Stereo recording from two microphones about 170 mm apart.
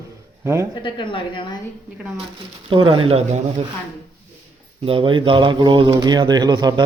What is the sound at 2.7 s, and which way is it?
Speech, 30° right (ahead or behind).